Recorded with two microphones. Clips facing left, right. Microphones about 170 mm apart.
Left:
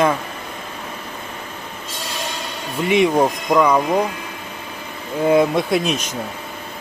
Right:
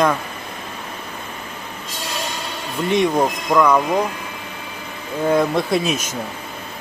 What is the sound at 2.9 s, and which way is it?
Speech, 10° left (ahead or behind).